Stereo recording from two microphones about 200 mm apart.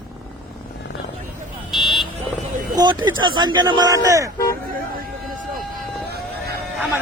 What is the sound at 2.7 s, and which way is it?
Speech, 20° right (ahead or behind).